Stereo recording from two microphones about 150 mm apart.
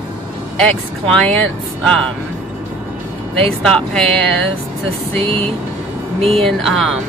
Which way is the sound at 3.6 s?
5° left (ahead or behind).